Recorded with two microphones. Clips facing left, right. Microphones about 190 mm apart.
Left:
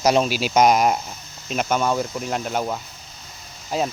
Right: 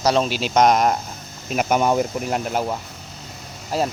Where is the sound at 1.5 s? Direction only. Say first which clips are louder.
Right 3 dB; 5° right (ahead or behind).